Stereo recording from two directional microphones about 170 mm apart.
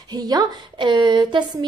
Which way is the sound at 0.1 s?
25° right (ahead or behind).